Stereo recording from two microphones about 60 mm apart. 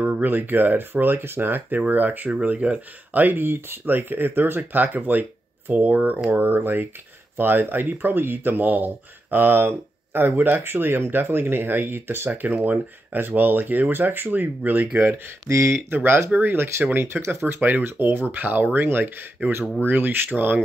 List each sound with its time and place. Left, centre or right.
0.0 s speech: right
15.0 s speech: right
15.5 s speech: right
15.9 s speech: right